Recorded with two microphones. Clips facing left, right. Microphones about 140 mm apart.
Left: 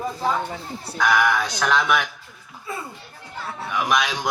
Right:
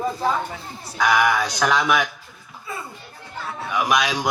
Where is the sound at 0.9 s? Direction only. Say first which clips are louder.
Right 1 dB; centre (ahead or behind).